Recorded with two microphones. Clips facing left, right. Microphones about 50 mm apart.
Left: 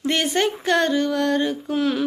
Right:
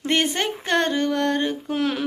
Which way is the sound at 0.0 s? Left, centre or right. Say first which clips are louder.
Right 1 dB; right.